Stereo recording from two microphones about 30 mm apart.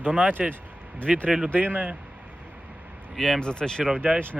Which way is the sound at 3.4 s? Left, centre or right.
Left.